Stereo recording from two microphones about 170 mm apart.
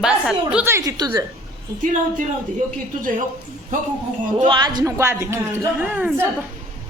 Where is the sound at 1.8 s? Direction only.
50° right (ahead or behind).